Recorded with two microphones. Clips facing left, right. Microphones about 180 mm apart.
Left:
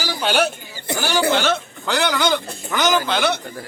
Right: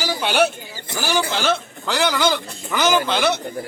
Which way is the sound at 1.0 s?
5° right (ahead or behind).